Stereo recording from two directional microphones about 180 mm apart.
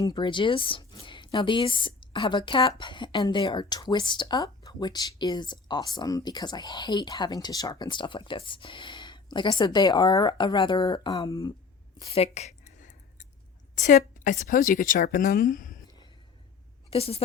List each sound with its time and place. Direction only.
0.0 s speech: 25° left (ahead or behind)
12.0 s a sound: 35° left (ahead or behind)
13.7 s a woman's voice: 45° left (ahead or behind)
16.9 s a woman's voice: 35° left (ahead or behind)